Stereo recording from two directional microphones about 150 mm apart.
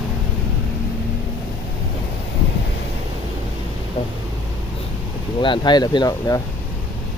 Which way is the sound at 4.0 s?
35° left (ahead or behind).